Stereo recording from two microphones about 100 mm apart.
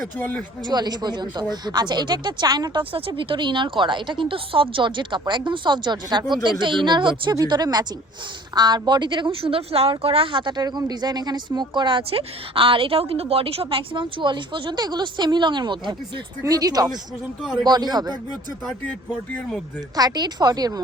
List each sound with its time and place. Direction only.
0.2 s speech: 15° left (ahead or behind)
0.6 s speech: 45° right (ahead or behind)
2.9 s speech: 60° right (ahead or behind); by 10.4 s 75° right (ahead or behind)
10.4 s speech: 45° right (ahead or behind)
16.4 s speech: 40° right (ahead or behind)
17.4 s a man's voice: centre (ahead or behind)
17.7 s speech: 45° right (ahead or behind)
20.0 s speech: 40° right (ahead or behind)